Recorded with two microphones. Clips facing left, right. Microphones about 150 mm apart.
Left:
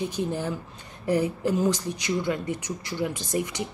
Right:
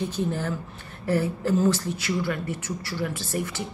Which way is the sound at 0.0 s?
15° left (ahead or behind).